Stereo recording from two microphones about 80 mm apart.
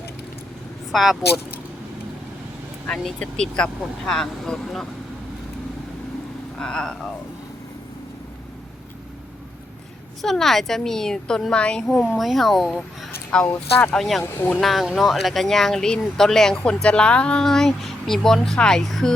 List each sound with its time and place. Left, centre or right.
0.9 s speech: centre
2.8 s speech: centre
6.6 s speech: centre
10.2 s speech: centre
12.0 s speech: centre
14.3 s speech: left
14.6 s speech: centre